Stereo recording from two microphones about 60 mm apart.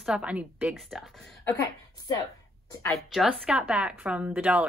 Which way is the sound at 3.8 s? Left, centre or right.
Right.